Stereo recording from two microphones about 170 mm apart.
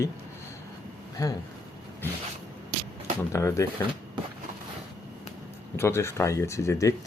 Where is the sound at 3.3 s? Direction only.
15° left (ahead or behind).